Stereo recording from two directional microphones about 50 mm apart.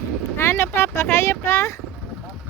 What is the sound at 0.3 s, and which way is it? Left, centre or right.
Speech, left.